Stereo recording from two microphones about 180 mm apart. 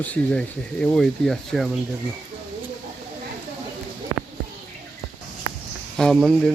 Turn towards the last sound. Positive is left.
turn(degrees=0)  # may be behind; listen again after turning